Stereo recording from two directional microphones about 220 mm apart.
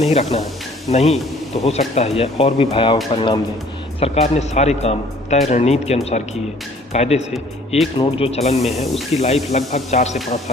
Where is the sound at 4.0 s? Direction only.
30° left (ahead or behind).